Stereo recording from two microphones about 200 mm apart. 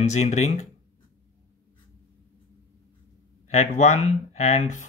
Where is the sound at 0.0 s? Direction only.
35° left (ahead or behind).